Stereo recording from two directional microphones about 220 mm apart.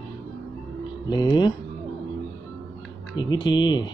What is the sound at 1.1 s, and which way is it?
Speech, 20° left (ahead or behind).